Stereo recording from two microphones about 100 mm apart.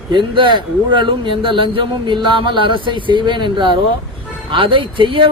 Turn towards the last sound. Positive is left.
turn(degrees=-60)  # may be behind; listen again after turning